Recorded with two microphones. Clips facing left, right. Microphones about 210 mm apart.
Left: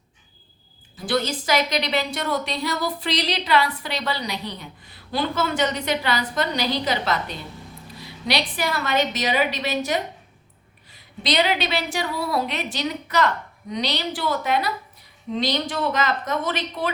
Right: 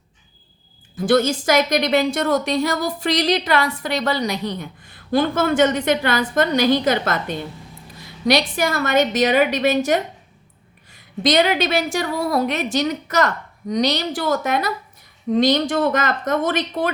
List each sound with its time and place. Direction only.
0.9 s a woman's voice: 50° right (ahead or behind)